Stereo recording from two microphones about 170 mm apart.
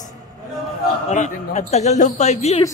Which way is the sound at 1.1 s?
45° left (ahead or behind).